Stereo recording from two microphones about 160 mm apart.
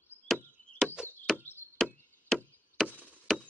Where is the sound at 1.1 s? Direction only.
10° left (ahead or behind).